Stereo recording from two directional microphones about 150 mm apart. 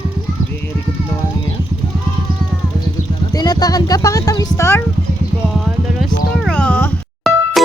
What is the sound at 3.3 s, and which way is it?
Speech, 25° left (ahead or behind).